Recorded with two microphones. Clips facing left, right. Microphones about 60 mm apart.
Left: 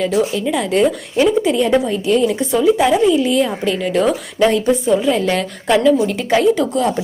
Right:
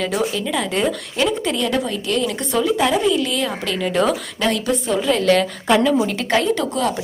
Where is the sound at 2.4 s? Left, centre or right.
Centre.